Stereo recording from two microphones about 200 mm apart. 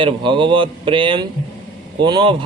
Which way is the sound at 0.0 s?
25° right (ahead or behind).